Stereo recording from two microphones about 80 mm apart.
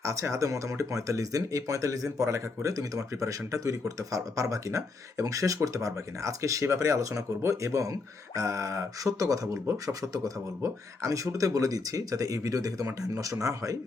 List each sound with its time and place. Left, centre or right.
0.0 s speech: right